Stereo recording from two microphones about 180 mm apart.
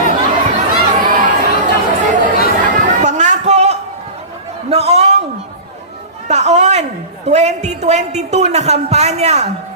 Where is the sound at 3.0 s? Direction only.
40° right (ahead or behind).